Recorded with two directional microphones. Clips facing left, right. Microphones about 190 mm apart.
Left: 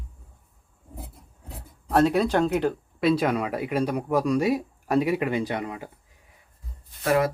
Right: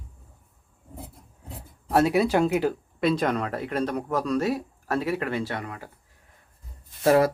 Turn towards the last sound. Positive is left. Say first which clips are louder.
# right 3 dB
turn(degrees=-35)  # may be behind; listen again after turning